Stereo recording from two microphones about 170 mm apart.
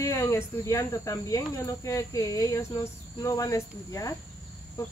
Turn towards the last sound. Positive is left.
turn(degrees=20)  # may be behind; listen again after turning